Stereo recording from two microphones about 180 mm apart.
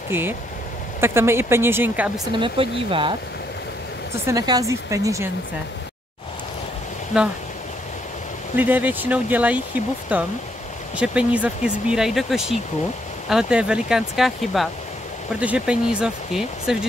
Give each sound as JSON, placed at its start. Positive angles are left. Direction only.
{"t": 0.1, "sound": "speech", "side_deg": -10}
{"t": 2.3, "sound": "speech", "side_deg": -30}
{"t": 7.1, "sound": "speech", "side_deg": 0}
{"t": 8.5, "sound": "speech", "side_deg": -10}